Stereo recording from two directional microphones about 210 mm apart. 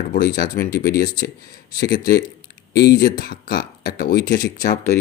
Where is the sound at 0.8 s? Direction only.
40° left (ahead or behind).